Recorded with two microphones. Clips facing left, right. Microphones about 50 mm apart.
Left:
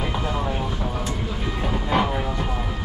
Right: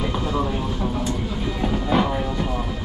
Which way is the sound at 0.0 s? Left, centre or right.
Left.